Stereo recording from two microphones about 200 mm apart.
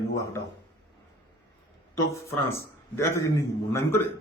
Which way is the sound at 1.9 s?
15° left (ahead or behind).